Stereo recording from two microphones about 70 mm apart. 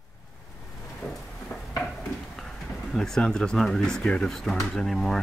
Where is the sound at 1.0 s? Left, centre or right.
Centre.